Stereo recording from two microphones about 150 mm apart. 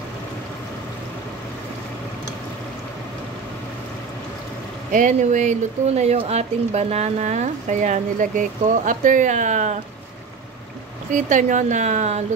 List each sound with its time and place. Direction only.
4.9 s speech: 55° right (ahead or behind)
11.1 s speech: 55° right (ahead or behind)